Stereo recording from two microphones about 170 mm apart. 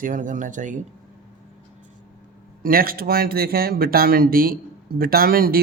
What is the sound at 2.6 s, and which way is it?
Speech, 60° right (ahead or behind).